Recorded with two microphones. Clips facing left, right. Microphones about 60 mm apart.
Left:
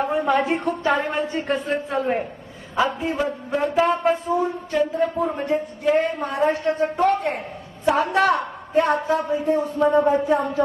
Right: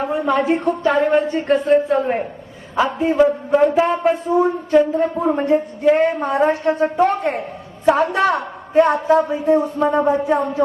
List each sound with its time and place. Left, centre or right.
0.0 s speech: centre
3.5 s music: centre
3.8 s speech: right
4.7 s a woman's voice: right
9.3 s speech: right